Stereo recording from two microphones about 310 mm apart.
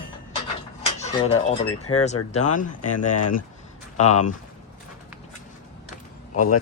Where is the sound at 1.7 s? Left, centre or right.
Left.